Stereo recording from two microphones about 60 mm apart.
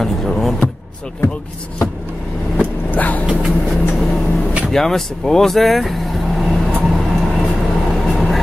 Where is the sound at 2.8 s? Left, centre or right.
Left.